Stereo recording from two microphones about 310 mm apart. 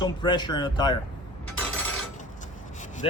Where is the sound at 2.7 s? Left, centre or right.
Left.